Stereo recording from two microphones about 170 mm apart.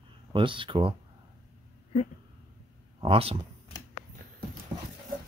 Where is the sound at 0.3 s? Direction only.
30° right (ahead or behind).